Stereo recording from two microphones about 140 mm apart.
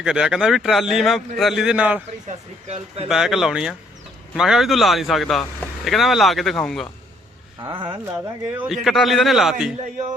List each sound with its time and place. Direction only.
0.0 s speech: 5° right (ahead or behind)
2.6 s speech: 45° right (ahead or behind)
3.1 s speech: 5° right (ahead or behind)
7.7 s speech: 35° right (ahead or behind)
8.5 s speech: 5° right (ahead or behind)